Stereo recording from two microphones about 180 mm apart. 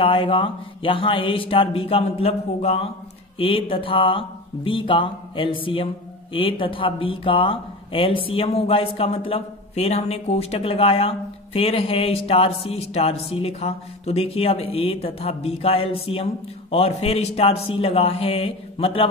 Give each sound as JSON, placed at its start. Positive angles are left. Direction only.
{"t": 0.0, "sound": "speech", "side_deg": 30}